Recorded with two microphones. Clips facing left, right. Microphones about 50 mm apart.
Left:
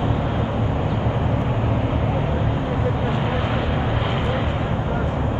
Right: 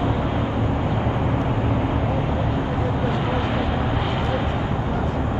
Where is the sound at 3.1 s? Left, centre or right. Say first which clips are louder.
Even; left.